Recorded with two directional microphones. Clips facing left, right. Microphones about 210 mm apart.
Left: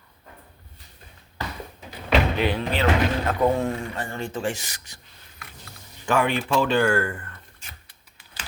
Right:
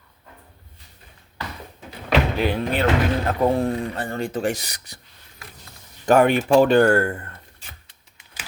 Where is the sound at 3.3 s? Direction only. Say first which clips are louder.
Right 2 dB; 30° right (ahead or behind).